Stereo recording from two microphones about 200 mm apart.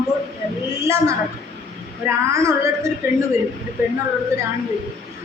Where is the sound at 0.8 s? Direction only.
15° right (ahead or behind).